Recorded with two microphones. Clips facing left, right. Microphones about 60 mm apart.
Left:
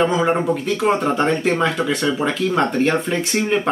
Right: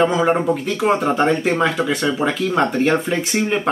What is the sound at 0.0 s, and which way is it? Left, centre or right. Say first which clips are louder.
Speech: right 1 dB; centre.